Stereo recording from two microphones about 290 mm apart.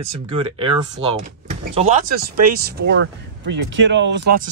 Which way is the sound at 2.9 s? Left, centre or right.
Right.